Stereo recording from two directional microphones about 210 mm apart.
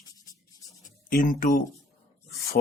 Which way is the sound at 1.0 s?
40° left (ahead or behind).